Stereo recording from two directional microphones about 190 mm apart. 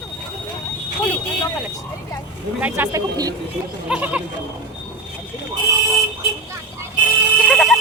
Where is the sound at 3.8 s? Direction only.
5° right (ahead or behind).